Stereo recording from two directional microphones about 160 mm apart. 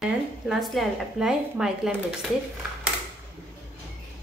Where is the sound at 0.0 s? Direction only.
Centre (ahead or behind).